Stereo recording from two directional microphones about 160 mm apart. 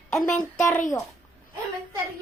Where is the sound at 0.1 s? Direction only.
5° left (ahead or behind).